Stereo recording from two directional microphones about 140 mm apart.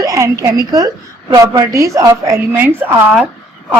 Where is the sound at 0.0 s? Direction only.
25° right (ahead or behind).